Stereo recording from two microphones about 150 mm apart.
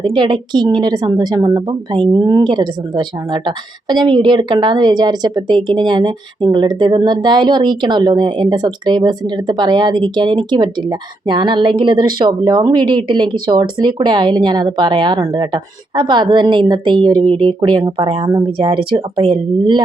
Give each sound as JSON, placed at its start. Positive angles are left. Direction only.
{"t": 0.0, "sound": "a woman's voice", "side_deg": -30}